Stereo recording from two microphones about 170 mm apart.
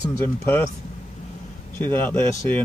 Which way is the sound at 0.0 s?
15° left (ahead or behind).